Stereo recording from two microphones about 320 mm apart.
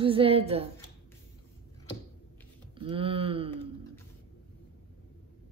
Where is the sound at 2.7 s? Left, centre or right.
Centre.